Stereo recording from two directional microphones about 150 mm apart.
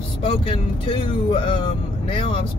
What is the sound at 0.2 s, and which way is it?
Speech, 35° left (ahead or behind).